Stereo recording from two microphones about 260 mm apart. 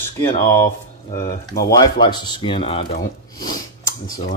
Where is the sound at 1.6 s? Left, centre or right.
Centre.